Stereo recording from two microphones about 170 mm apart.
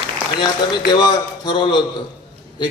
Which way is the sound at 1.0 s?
25° left (ahead or behind).